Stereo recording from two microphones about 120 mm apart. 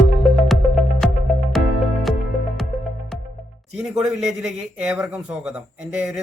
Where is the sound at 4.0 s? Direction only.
Centre (ahead or behind).